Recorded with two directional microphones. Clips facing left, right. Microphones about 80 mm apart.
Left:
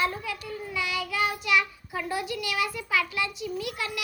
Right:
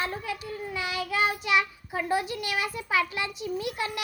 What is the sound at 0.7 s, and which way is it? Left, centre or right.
Child singing, right.